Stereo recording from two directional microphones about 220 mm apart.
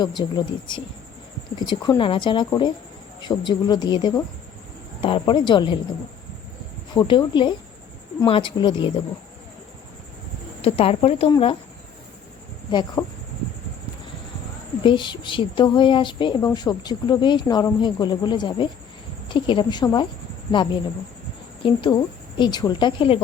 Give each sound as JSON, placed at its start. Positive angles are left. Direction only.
{"t": 0.0, "sound": "a woman's voice", "side_deg": 20}
{"t": 6.9, "sound": "a woman's voice", "side_deg": 20}
{"t": 10.6, "sound": "a woman's voice", "side_deg": 25}
{"t": 13.0, "sound": "speech", "side_deg": 10}
{"t": 14.8, "sound": "a woman's voice", "side_deg": 20}
{"t": 21.6, "sound": "a woman's voice", "side_deg": 20}